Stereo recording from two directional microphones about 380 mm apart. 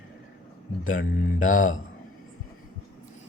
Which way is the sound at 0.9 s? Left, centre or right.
Left.